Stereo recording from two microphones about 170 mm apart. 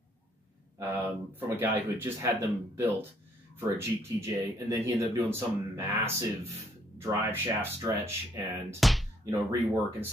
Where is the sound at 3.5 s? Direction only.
15° right (ahead or behind).